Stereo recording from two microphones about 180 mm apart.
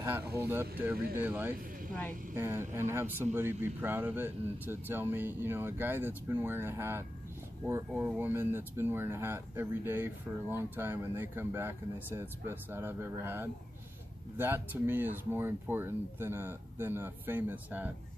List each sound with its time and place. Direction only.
0.5 s speech: 10° right (ahead or behind)